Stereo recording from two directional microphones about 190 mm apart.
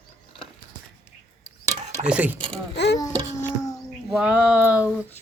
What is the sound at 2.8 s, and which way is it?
Speech, 65° left (ahead or behind).